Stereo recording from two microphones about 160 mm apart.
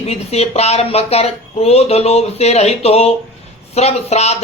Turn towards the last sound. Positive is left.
turn(degrees=40)  # may be behind; listen again after turning